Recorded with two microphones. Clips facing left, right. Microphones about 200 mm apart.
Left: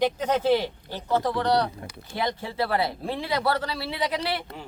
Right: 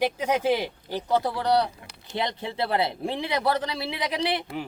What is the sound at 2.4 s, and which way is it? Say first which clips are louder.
Speech: right 1 dB; 20° right (ahead or behind).